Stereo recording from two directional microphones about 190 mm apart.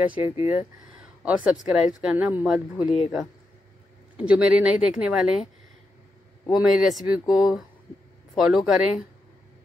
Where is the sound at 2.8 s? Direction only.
35° left (ahead or behind).